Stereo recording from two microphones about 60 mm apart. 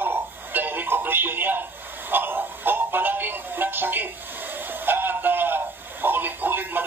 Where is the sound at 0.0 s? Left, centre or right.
Right.